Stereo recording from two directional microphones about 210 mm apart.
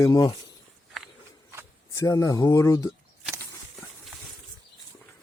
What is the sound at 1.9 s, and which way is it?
Speech, 15° left (ahead or behind).